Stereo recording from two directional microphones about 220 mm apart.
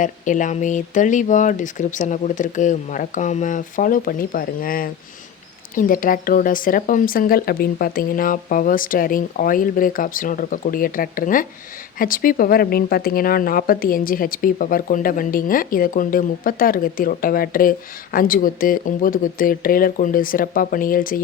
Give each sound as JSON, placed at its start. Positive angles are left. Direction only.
{"t": 0.0, "sound": "speech", "side_deg": 35}